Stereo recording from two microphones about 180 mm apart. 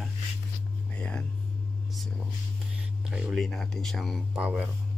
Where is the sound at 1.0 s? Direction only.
5° left (ahead or behind).